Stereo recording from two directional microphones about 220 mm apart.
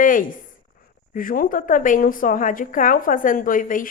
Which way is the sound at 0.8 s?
40° left (ahead or behind).